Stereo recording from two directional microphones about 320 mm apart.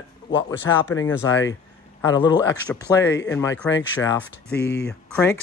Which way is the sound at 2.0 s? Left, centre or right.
Centre.